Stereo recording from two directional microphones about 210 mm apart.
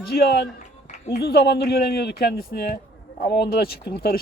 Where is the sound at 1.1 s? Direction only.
50° left (ahead or behind).